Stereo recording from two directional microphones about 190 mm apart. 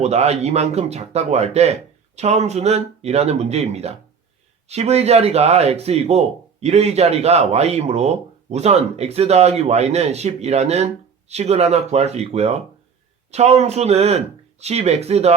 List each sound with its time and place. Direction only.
0.0 s speech: 35° right (ahead or behind)